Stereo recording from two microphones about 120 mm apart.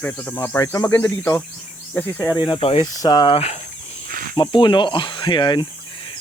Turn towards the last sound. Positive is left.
turn(degrees=40)  # may be behind; listen again after turning